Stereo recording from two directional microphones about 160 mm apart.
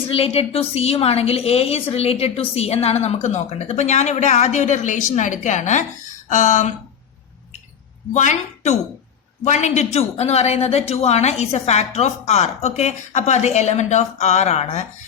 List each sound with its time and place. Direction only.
0.1 s a woman's voice: 35° left (ahead or behind)
8.1 s a woman's voice: 45° left (ahead or behind)